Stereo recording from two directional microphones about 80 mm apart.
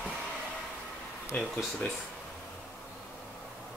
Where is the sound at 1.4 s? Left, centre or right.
Centre.